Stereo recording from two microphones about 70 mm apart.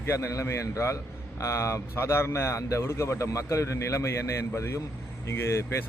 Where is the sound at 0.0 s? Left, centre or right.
Left.